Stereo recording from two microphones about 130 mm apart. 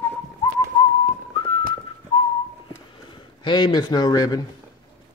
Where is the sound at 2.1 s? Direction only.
45° left (ahead or behind).